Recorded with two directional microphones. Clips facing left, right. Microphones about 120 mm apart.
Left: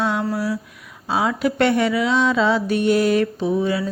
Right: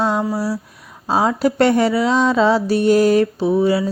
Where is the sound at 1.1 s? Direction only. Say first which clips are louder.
Right 4 dB; 40° right (ahead or behind).